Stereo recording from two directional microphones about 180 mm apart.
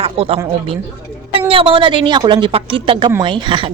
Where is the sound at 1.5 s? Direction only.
30° right (ahead or behind).